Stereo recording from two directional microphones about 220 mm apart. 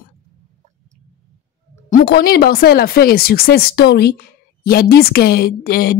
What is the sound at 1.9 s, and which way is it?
Speech, 40° left (ahead or behind).